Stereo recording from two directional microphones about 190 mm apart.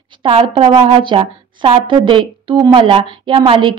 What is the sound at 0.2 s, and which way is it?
A woman's voice, 25° right (ahead or behind).